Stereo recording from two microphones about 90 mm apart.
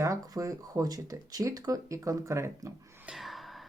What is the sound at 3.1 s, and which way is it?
Gasp, centre (ahead or behind).